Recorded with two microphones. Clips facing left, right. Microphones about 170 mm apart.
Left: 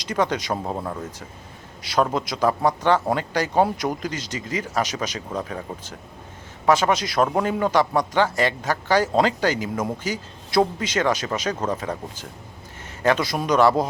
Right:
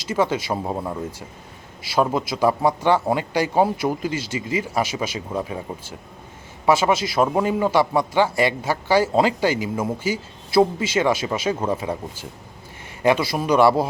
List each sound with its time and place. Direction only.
0.0 s a man's voice: 5° right (ahead or behind)